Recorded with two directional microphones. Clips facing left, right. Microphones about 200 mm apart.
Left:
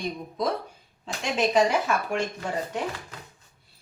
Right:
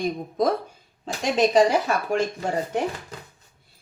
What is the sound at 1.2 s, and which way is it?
Speech, 35° right (ahead or behind).